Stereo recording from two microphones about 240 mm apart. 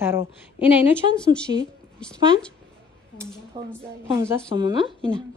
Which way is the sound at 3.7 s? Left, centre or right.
Centre.